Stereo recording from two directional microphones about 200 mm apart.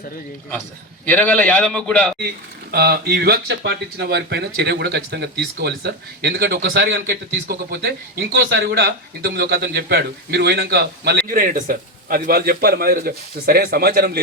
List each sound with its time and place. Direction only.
1.0 s a man's voice: 5° left (ahead or behind)
2.7 s speech: 55° right (ahead or behind)